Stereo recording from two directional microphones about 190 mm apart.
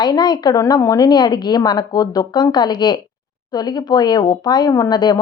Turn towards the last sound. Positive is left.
turn(degrees=20)  # may be behind; listen again after turning